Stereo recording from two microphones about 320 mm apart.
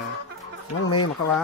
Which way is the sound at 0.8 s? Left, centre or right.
Left.